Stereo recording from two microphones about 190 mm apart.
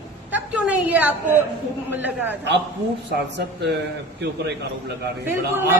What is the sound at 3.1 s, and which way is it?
Speech, 60° right (ahead or behind).